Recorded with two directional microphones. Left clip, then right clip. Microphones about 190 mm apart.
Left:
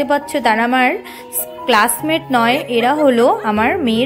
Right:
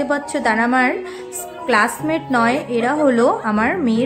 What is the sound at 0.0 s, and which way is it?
A woman's voice, 10° left (ahead or behind).